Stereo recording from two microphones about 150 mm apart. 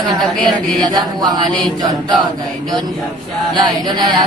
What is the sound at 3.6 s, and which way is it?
Chant, 30° right (ahead or behind).